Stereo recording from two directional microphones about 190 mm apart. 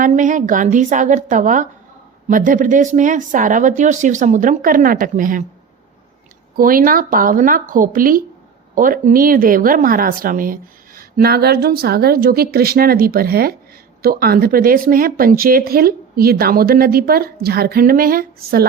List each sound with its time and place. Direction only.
0.0 s a woman's voice: 40° right (ahead or behind)
6.6 s speech: 45° right (ahead or behind)